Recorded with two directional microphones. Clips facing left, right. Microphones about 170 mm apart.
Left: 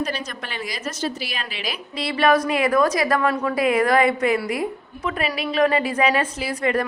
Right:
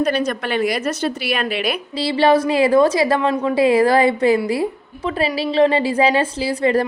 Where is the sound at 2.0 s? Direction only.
30° right (ahead or behind).